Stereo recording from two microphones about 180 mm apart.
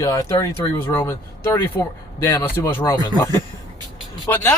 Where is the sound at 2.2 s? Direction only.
15° left (ahead or behind).